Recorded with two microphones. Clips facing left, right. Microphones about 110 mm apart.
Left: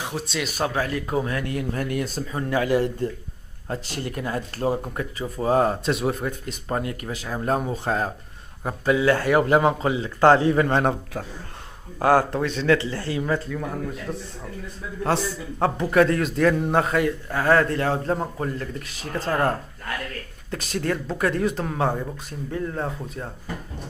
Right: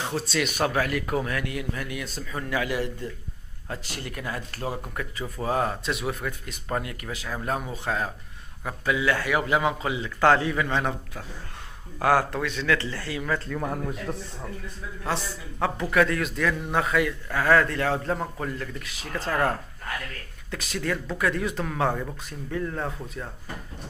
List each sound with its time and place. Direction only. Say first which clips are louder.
0.0 s speech: right 1 dB; 15° left (ahead or behind)
10.6 s a man's voice: left 6 dB; 45° left (ahead or behind)
12.0 s speech: left 3 dB; 30° left (ahead or behind)
13.8 s a man's voice: left 1 dB; 15° right (ahead or behind)
15.8 s speech: left 4 dB; 35° left (ahead or behind)
20.5 s speech: left 3 dB; 35° left (ahead or behind)